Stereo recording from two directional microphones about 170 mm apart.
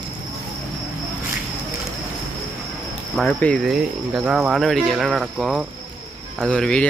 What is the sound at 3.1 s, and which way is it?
Speech, 5° left (ahead or behind).